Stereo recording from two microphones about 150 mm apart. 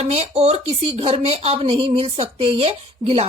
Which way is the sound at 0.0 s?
45° right (ahead or behind).